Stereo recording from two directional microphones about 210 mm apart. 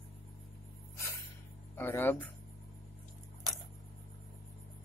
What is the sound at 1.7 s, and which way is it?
Speech, 10° left (ahead or behind).